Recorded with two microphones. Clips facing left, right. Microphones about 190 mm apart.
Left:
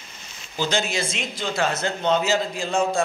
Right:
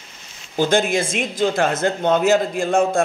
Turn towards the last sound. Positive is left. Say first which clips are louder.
# right 5 dB
turn(degrees=-50)  # may be behind; listen again after turning